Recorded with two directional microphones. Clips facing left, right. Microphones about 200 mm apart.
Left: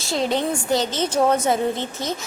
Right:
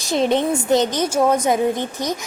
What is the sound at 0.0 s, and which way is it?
A woman's voice, 20° right (ahead or behind).